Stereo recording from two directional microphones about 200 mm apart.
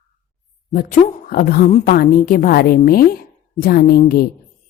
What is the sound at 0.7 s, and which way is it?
A woman's voice, 45° left (ahead or behind).